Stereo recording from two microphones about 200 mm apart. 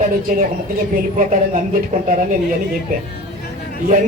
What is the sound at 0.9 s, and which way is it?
A man's voice, 40° right (ahead or behind).